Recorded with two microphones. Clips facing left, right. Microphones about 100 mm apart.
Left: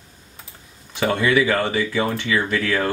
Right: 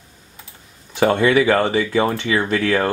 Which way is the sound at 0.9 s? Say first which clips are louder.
Right 4 dB; 35° right (ahead or behind).